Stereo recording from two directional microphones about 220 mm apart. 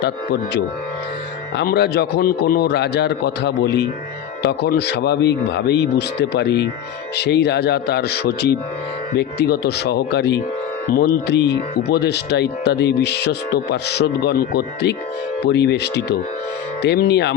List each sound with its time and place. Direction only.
0.0 s speech: 50° left (ahead or behind)